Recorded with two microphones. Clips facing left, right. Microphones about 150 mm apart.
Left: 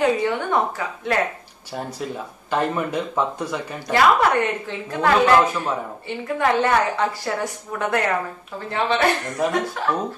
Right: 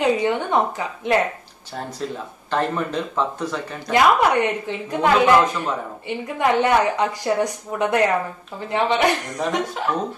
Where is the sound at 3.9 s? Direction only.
15° right (ahead or behind).